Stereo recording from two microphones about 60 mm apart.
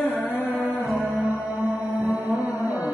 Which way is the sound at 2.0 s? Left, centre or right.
Right.